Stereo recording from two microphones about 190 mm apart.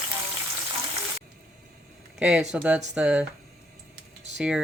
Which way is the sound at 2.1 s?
5° right (ahead or behind).